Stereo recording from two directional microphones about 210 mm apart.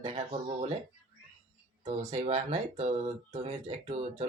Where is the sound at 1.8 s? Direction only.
35° right (ahead or behind).